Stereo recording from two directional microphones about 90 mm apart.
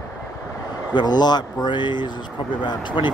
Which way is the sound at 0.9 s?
50° left (ahead or behind).